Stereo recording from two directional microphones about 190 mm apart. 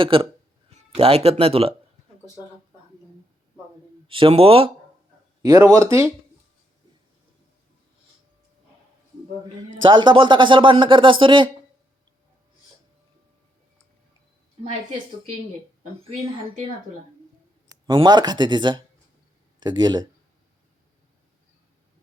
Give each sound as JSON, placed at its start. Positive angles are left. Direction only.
{"t": 0.0, "sound": "speech", "side_deg": -25}
{"t": 4.0, "sound": "speech", "side_deg": -30}
{"t": 5.4, "sound": "speech", "side_deg": -20}
{"t": 9.8, "sound": "speech", "side_deg": -25}
{"t": 16.0, "sound": "speech", "side_deg": -30}
{"t": 17.8, "sound": "speech", "side_deg": -20}